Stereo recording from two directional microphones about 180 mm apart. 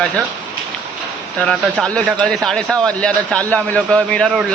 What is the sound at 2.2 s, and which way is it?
Speech, 5° left (ahead or behind).